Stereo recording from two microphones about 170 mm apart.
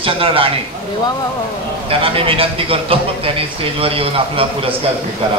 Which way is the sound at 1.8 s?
35° right (ahead or behind).